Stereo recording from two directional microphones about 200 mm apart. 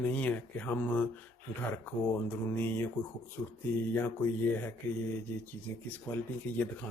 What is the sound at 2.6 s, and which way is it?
Speech, 10° left (ahead or behind).